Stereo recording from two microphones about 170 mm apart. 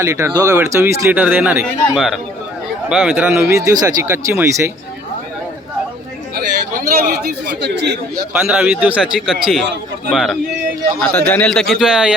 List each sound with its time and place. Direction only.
0.0 s speech: 15° right (ahead or behind)
6.3 s chatter: 60° right (ahead or behind); by 7.9 s 85° right
8.3 s a man's voice: 5° right (ahead or behind)